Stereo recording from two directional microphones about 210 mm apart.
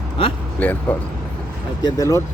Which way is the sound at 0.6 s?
5° left (ahead or behind).